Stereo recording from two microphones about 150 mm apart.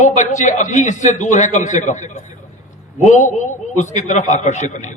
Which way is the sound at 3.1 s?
55° left (ahead or behind).